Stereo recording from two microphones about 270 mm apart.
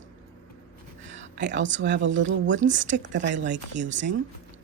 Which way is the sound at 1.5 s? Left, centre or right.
Right.